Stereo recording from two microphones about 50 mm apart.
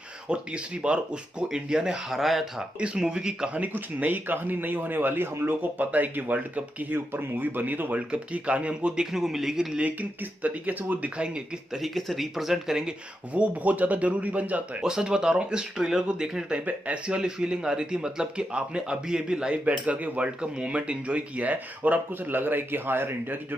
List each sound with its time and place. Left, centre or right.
0.8 s speech: right
2.1 s speech: centre
2.8 s speech: centre
3.5 s speech: right
8.1 s speech: right
9.1 s speech: centre
10.4 s speech: right
11.7 s speech: centre
13.3 s speech: right
14.8 s speech: centre; by 23.1 s right